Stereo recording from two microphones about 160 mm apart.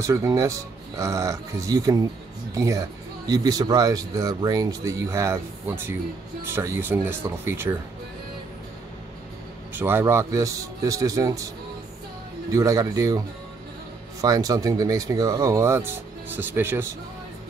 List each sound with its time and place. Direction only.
0.0 s speech: 20° right (ahead or behind)
9.8 s speech: 15° right (ahead or behind)
14.2 s speech: 20° right (ahead or behind)